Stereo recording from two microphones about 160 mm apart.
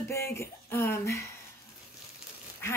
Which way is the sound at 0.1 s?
15° left (ahead or behind).